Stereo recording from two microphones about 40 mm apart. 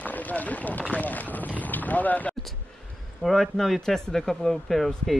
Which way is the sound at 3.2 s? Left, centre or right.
Centre.